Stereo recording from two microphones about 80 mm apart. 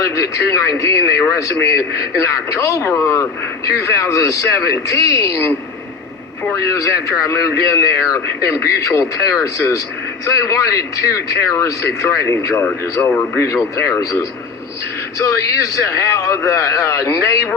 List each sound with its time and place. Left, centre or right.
0.0 s a man's voice: left
12.6 s a man's voice: left
15.8 s a man's voice: left